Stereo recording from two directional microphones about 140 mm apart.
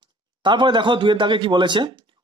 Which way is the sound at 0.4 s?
35° right (ahead or behind).